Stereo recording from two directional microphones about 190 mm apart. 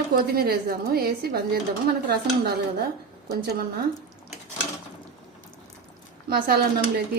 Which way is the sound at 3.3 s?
55° right (ahead or behind).